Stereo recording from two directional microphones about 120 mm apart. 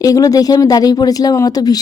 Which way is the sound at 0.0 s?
30° left (ahead or behind).